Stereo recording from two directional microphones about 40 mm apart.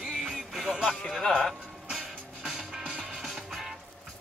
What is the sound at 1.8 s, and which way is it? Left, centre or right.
Music, centre.